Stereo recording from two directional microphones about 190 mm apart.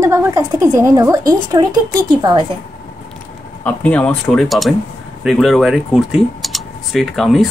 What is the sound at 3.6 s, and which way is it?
Speech, 10° left (ahead or behind).